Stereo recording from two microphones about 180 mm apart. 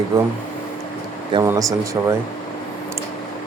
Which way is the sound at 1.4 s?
20° right (ahead or behind).